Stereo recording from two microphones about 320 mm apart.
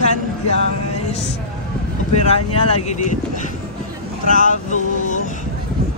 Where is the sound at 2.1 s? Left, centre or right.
Centre.